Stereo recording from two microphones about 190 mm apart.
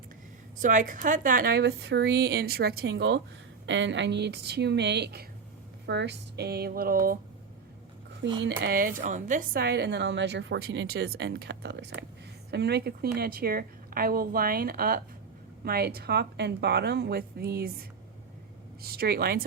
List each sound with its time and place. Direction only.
0.6 s a woman's voice: 45° right (ahead or behind)
8.4 s a woman's voice: 55° right (ahead or behind)